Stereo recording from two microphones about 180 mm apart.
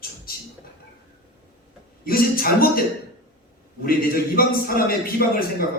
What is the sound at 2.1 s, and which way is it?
A man's voice, 55° left (ahead or behind).